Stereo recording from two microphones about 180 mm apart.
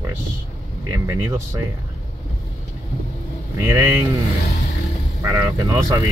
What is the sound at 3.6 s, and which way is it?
Speech, 15° right (ahead or behind).